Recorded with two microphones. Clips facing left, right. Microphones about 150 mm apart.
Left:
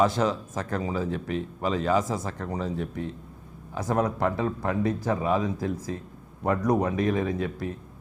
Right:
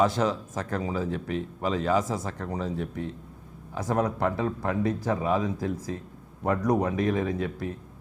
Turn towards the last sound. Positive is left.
turn(degrees=20)  # may be behind; listen again after turning